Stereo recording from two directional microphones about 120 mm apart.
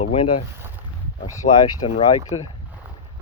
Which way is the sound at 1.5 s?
35° left (ahead or behind).